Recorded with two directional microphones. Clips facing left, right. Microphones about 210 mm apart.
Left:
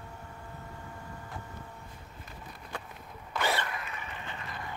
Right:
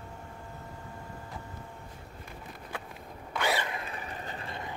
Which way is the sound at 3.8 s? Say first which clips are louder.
Right 3 dB; 35° right (ahead or behind).